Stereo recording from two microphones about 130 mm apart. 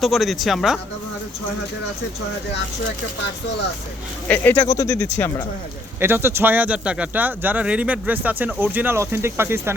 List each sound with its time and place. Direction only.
0.0 s speech: centre (ahead or behind)
4.3 s speech: 15° left (ahead or behind)
6.0 s speech: 15° right (ahead or behind)